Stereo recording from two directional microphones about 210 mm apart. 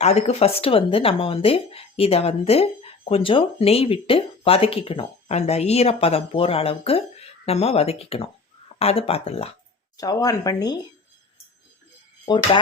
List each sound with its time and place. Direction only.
0.0 s speech: 30° left (ahead or behind)